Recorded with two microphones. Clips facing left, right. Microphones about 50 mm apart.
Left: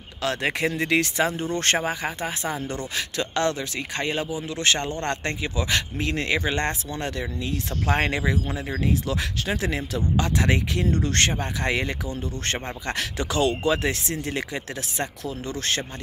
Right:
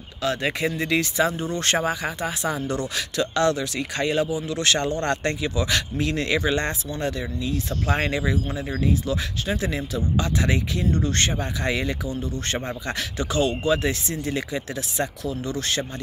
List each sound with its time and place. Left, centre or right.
0.2 s speech: left
1.8 s speech: left
6.6 s speech: left
13.2 s speech: left
13.8 s speech: left